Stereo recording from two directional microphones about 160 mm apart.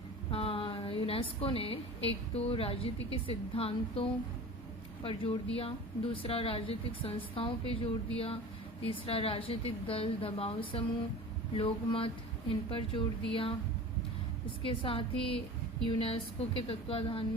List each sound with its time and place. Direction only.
0.3 s a woman's voice: 35° left (ahead or behind)
5.0 s a woman's voice: 35° left (ahead or behind)
14.6 s a woman's voice: 35° left (ahead or behind)